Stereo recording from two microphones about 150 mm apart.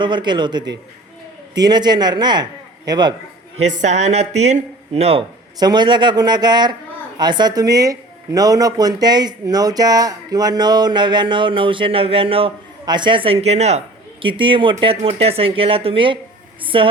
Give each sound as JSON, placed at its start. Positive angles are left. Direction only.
{"t": 0.0, "sound": "a man's voice", "side_deg": -30}
{"t": 3.7, "sound": "speech", "side_deg": -55}
{"t": 5.5, "sound": "a man's voice", "side_deg": -30}